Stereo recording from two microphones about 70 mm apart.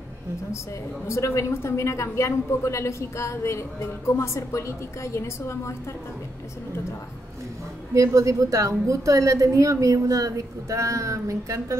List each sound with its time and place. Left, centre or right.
1.0 s a woman's voice: left
7.9 s a woman's voice: right